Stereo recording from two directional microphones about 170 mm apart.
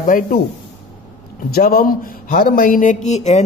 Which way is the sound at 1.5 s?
60° left (ahead or behind).